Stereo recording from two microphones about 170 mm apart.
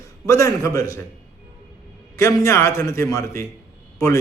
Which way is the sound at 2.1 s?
15° left (ahead or behind).